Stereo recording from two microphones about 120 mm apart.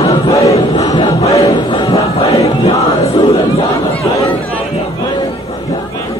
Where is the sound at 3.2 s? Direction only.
50° left (ahead or behind).